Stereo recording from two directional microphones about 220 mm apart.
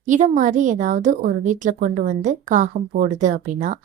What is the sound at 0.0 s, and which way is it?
A woman's voice, 35° right (ahead or behind).